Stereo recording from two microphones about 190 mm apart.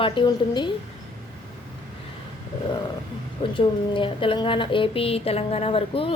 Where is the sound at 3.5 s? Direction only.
25° left (ahead or behind).